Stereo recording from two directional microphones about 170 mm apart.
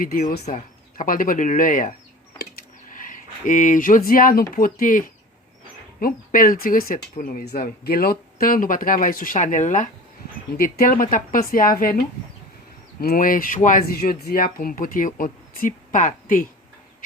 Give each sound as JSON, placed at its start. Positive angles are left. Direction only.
{"t": 0.0, "sound": "speech", "side_deg": 55}
{"t": 2.4, "sound": "a sound", "side_deg": 55}
{"t": 4.5, "sound": "speech", "side_deg": 55}